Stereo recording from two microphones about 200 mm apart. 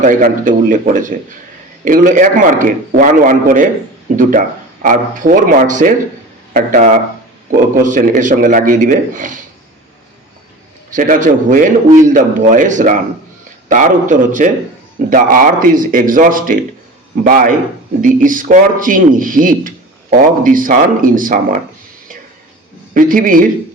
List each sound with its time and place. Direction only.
0.0 s a man's voice: 40° right (ahead or behind)
10.9 s a man's voice: 40° right (ahead or behind)
23.0 s speech: 45° right (ahead or behind)